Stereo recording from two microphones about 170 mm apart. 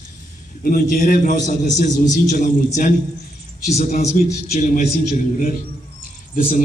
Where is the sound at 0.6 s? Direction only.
50° left (ahead or behind).